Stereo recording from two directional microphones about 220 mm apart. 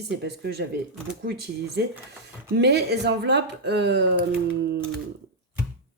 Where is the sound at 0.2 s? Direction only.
50° right (ahead or behind).